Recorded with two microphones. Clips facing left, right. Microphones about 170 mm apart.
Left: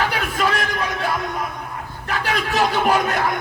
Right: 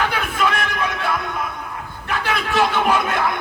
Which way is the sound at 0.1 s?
40° left (ahead or behind).